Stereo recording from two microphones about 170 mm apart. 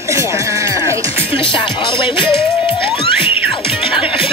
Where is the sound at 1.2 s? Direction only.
30° left (ahead or behind).